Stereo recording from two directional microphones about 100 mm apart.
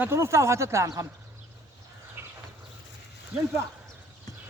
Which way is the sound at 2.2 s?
20° right (ahead or behind).